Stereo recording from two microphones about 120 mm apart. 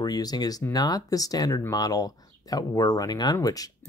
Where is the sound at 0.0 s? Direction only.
30° left (ahead or behind).